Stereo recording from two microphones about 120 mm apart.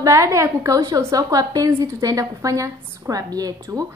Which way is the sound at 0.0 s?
25° right (ahead or behind).